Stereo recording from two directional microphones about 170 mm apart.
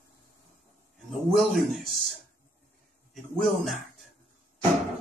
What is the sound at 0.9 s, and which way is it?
A man's voice, centre (ahead or behind).